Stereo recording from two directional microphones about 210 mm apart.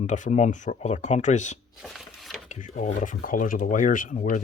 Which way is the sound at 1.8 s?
Centre (ahead or behind).